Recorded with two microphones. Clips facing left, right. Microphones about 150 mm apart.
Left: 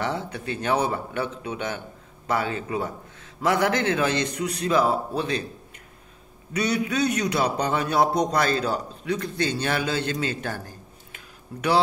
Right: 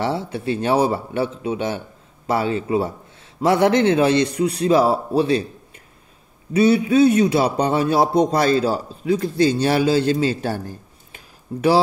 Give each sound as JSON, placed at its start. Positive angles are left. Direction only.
{"t": 0.0, "sound": "a man's voice", "side_deg": -30}
{"t": 6.5, "sound": "a man's voice", "side_deg": -25}